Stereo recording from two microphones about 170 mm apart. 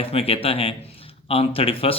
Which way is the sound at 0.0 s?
35° left (ahead or behind).